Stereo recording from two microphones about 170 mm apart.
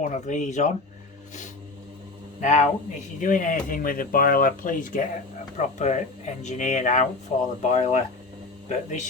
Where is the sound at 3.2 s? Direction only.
50° left (ahead or behind).